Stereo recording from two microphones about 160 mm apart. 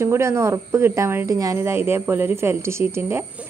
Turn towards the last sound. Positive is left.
turn(degrees=-15)  # may be behind; listen again after turning